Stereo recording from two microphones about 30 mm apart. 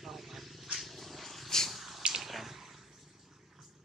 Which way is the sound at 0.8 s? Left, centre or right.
Centre.